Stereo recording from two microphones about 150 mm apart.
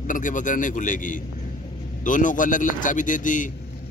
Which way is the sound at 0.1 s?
60° left (ahead or behind).